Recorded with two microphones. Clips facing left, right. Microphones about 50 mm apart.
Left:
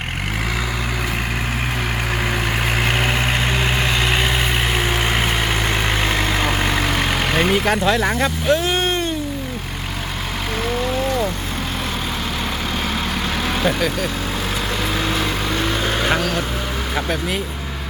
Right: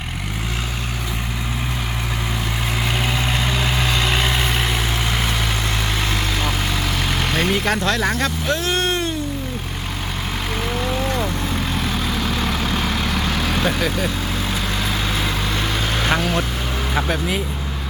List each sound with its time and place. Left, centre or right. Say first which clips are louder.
3.6 s vehicle: left 1 dB; centre
7.3 s vehicle: left 2 dB; centre
13.7 s speech: left 3 dB; centre
16.9 s speech: right 1 dB; centre